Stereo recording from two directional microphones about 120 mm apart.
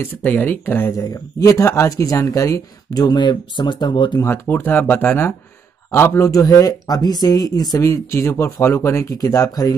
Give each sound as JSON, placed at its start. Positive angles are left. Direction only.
{"t": 0.0, "sound": "speech", "side_deg": 15}
{"t": 0.9, "sound": "speech", "side_deg": 30}
{"t": 4.2, "sound": "speech", "side_deg": 20}